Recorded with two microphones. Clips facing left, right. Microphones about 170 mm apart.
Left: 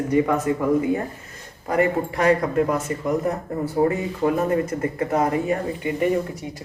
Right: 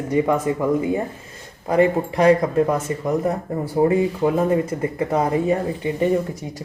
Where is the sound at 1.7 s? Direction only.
25° right (ahead or behind).